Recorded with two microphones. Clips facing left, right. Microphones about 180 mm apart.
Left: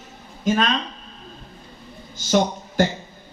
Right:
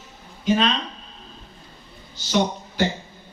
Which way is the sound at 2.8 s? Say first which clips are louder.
Left 3 dB; 45° left (ahead or behind).